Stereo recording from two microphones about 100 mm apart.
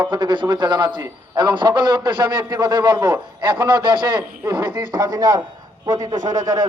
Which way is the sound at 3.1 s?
50° right (ahead or behind).